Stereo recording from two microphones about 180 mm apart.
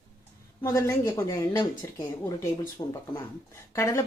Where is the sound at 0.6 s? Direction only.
15° left (ahead or behind).